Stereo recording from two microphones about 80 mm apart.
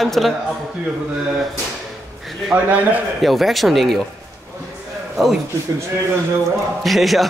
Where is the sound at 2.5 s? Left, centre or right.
Right.